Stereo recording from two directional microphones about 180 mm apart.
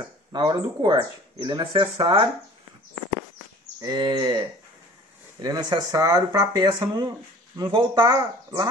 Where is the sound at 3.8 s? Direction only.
25° right (ahead or behind).